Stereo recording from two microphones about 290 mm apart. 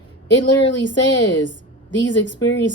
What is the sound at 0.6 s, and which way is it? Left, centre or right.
A woman's voice, left.